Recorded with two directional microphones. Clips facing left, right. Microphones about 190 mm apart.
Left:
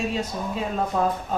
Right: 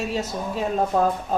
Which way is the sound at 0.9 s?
40° right (ahead or behind).